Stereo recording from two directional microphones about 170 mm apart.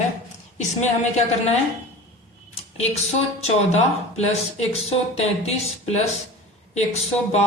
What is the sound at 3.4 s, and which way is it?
Speech, 40° left (ahead or behind).